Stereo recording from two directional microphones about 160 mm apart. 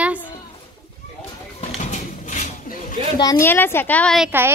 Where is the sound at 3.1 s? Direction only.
20° left (ahead or behind).